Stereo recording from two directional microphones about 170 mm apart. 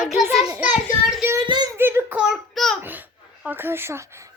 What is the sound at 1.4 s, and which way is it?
Speech, 25° right (ahead or behind).